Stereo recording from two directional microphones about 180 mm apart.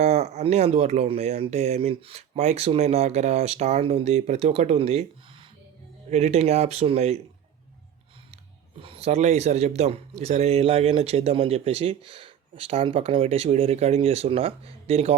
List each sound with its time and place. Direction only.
0.0 s a man's voice: 35° right (ahead or behind)
6.1 s a man's voice: 35° right (ahead or behind)
8.8 s a man's voice: 30° right (ahead or behind)